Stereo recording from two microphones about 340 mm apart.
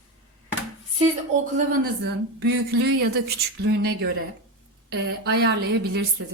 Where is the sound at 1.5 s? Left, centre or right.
Right.